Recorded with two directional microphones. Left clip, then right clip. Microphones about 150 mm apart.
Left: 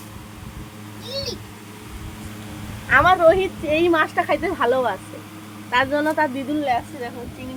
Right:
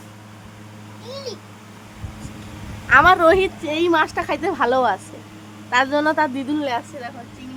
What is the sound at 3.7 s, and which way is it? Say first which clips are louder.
A woman's voice: left 2 dB; 10° right (ahead or behind).